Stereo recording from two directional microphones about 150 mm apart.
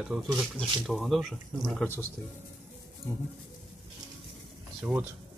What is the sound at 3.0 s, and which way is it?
Speech, 20° left (ahead or behind).